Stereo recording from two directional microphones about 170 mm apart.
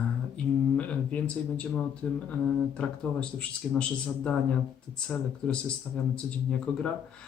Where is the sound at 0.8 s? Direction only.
10° left (ahead or behind).